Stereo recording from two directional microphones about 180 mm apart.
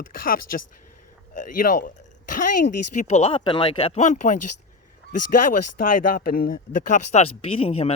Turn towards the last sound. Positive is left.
turn(degrees=35)  # may be behind; listen again after turning